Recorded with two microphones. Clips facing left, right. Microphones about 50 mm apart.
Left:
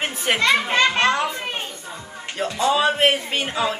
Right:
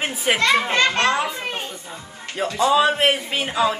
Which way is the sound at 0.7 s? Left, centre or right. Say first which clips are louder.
Left 1 dB; centre.